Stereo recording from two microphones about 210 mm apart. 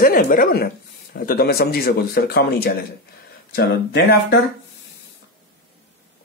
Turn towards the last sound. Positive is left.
turn(degrees=50)  # may be behind; listen again after turning